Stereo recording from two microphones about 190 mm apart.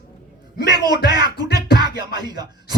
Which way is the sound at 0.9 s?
60° left (ahead or behind).